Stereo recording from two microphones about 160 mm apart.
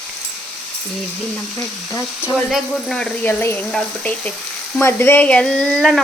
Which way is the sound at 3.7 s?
5° left (ahead or behind).